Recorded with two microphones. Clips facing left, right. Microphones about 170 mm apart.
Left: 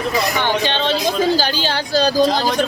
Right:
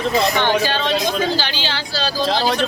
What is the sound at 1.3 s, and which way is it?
Speech, 45° left (ahead or behind).